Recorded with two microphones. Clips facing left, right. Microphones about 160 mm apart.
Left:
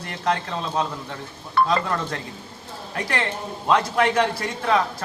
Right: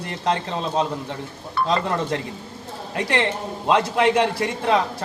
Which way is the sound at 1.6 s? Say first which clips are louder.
Left 3 dB; 70° left (ahead or behind).